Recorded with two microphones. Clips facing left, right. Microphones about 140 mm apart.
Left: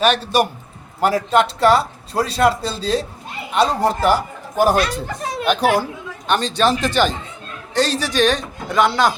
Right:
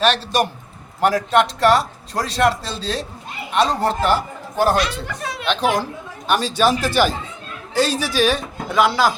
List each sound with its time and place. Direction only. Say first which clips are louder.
0.0 s speech: left 2 dB; 5° left (ahead or behind)
4.8 s speech: left 2 dB; 40° left (ahead or behind)
5.5 s speech: left 3 dB; 10° left (ahead or behind)
6.2 s a man's voice: even; 5° right (ahead or behind)